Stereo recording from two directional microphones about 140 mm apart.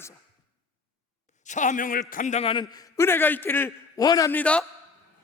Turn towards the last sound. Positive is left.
turn(degrees=10)  # may be behind; listen again after turning